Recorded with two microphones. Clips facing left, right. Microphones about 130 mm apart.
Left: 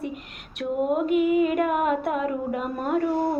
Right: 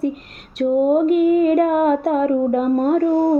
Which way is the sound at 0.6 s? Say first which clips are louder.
Right 9 dB; 40° right (ahead or behind).